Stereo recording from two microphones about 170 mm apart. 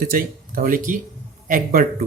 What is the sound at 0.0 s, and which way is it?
Speech, 55° right (ahead or behind).